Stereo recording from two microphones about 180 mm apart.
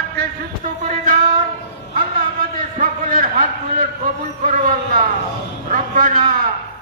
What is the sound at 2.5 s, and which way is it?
A man's voice, 50° right (ahead or behind).